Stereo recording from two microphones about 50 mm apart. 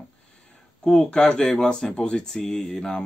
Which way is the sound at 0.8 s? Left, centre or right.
Centre.